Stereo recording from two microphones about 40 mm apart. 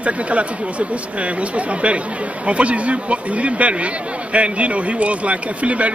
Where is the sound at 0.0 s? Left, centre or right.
Right.